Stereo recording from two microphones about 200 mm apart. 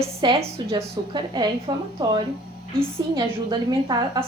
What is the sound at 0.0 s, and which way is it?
Speech, 30° right (ahead or behind).